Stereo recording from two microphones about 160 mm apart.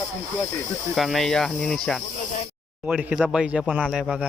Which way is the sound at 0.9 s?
Centre (ahead or behind).